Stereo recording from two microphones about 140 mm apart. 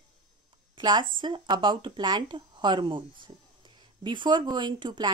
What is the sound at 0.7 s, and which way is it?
A woman's voice, 35° right (ahead or behind).